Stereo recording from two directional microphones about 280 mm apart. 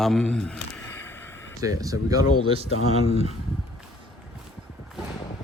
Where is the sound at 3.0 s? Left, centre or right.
Left.